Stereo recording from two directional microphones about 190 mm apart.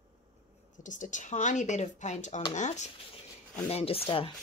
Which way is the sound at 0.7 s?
40° left (ahead or behind).